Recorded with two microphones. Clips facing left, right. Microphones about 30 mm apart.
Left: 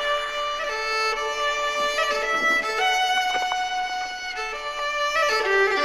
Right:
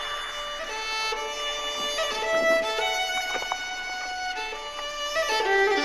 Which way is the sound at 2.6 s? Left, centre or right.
Left.